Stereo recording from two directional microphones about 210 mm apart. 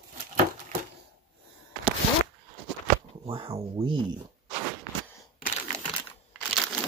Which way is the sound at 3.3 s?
25° right (ahead or behind).